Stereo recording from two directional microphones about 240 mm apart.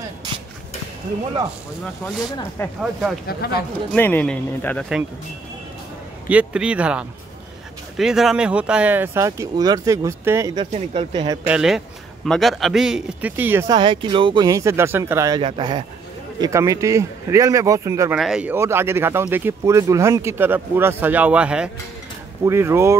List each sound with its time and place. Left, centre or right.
2.8 s speech: centre
3.3 s speech: left
3.9 s speech: centre
6.2 s speech: centre; by 11.3 s right
11.4 s speech: centre